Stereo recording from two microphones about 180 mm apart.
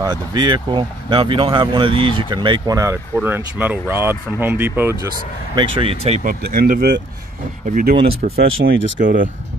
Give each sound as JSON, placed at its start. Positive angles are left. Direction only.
{"t": 0.0, "sound": "speech", "side_deg": -25}
{"t": 5.8, "sound": "speech", "side_deg": -35}
{"t": 6.5, "sound": "speech", "side_deg": -55}
{"t": 8.5, "sound": "speech", "side_deg": -90}
{"t": 9.0, "sound": "speech", "side_deg": -50}